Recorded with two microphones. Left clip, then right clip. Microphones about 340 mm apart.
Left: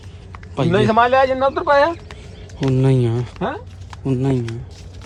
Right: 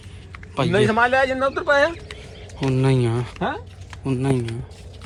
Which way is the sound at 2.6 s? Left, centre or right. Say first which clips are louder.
Left 3 dB; centre.